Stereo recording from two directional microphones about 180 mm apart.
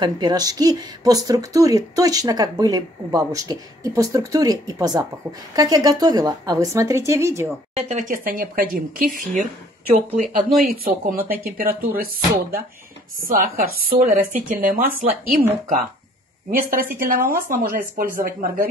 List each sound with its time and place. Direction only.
0.0 s speech: 20° right (ahead or behind)
7.7 s speech: 45° right (ahead or behind)
9.8 s speech: 35° right (ahead or behind)
10.3 s speech: 55° right (ahead or behind)
16.4 s speech: 50° right (ahead or behind)